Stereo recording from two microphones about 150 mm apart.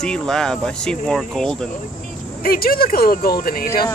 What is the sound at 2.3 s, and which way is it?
Speech, 80° left.